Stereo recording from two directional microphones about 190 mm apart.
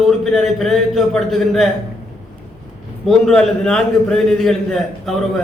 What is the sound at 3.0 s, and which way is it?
A man's voice, centre (ahead or behind).